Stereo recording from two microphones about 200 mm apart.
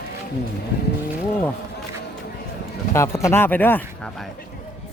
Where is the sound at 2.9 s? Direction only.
15° left (ahead or behind).